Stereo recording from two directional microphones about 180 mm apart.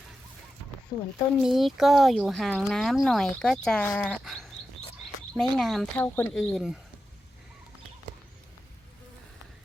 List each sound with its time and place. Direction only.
0.9 s speech: 25° left (ahead or behind)
1.4 s speech: centre (ahead or behind)